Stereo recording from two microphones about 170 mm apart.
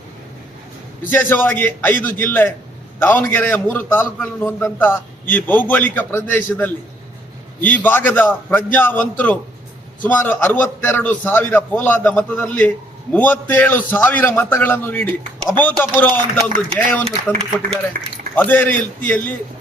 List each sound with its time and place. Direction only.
1.1 s a man's voice: 10° left (ahead or behind)
18.0 s speech: 50° right (ahead or behind)
18.3 s a man's voice: 10° left (ahead or behind)